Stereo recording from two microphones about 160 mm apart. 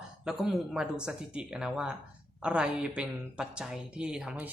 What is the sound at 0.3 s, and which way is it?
Speech, centre (ahead or behind).